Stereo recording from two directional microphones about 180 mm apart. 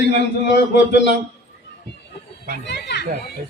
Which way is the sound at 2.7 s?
70° left (ahead or behind).